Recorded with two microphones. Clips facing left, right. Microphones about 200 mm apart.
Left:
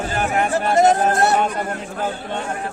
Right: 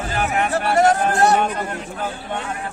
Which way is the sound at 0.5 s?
20° left (ahead or behind).